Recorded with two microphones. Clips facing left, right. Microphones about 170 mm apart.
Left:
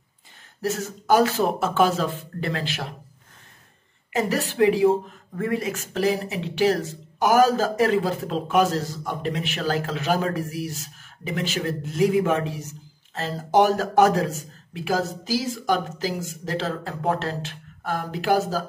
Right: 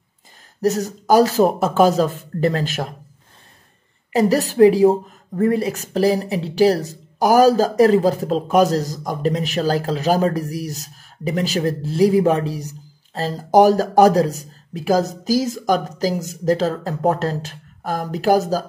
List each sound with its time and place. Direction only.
0.6 s speech: 40° right (ahead or behind)
4.1 s speech: 35° right (ahead or behind)